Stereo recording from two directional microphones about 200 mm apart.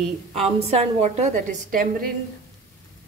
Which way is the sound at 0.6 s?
30° right (ahead or behind).